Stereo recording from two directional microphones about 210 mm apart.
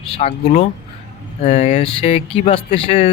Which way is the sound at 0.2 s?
35° left (ahead or behind).